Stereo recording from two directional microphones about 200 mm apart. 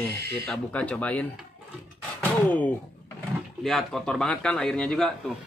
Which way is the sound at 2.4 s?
5° left (ahead or behind).